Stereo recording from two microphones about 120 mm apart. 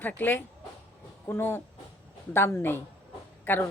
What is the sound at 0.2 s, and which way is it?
Speech, 15° left (ahead or behind).